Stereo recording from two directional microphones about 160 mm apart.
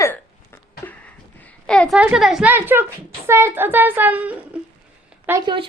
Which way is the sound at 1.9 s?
5° right (ahead or behind).